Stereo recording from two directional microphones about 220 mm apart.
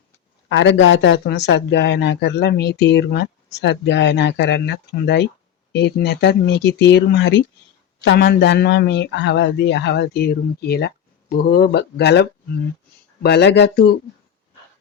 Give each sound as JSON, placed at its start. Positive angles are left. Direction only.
{"t": 0.4, "sound": "a man's voice", "side_deg": 55}